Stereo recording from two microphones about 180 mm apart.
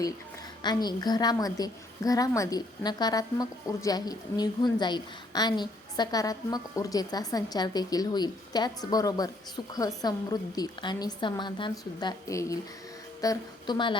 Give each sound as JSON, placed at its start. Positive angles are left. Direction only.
{"t": 0.6, "sound": "a woman's voice", "side_deg": 25}